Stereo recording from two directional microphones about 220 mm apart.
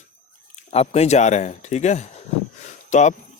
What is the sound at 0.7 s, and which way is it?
Speech, 30° left (ahead or behind).